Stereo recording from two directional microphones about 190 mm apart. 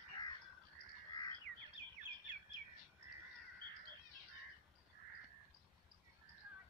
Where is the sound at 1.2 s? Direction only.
20° left (ahead or behind).